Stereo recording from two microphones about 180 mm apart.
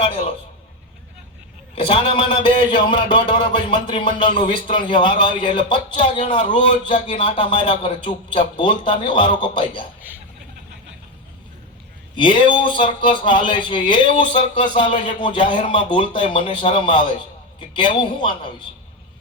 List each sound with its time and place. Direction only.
0.0 s a sound: 30° left (ahead or behind)
1.7 s speech: 30° left (ahead or behind)
12.1 s speech: 25° left (ahead or behind)